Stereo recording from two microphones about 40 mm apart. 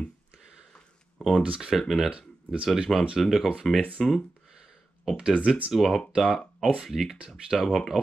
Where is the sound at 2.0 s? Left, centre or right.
Right.